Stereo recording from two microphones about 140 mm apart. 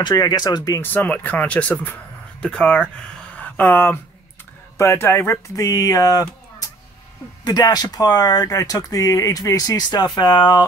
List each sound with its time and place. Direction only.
0.0 s speech: 30° left (ahead or behind)
0.9 s speech: 10° left (ahead or behind); by 10.6 s 35° left (ahead or behind)